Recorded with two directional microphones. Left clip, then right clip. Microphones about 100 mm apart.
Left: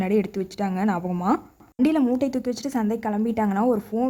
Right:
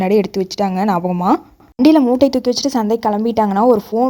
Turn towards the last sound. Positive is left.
turn(degrees=-30)  # may be behind; listen again after turning